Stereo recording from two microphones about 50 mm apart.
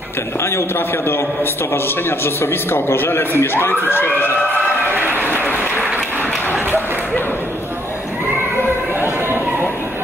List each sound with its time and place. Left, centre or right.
0.4 s a man's voice: left